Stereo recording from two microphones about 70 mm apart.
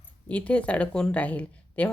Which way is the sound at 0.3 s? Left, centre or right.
Centre.